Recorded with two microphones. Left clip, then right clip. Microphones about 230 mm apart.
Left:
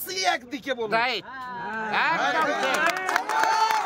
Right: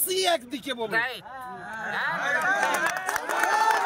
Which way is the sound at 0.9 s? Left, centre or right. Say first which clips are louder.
Left 4 dB; left.